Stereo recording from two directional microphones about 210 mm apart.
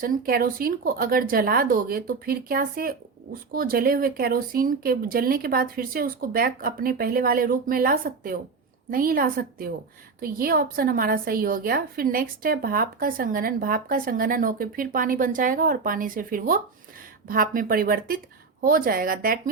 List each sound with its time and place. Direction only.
0.0 s a woman's voice: 40° right (ahead or behind)